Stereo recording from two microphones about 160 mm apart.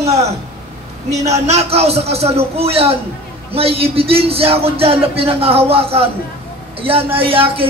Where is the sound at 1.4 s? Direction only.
40° right (ahead or behind).